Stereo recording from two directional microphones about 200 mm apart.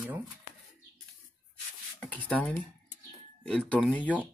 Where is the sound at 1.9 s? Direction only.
10° left (ahead or behind).